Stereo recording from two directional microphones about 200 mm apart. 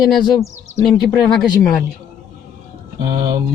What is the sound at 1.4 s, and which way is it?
Speech, 15° left (ahead or behind).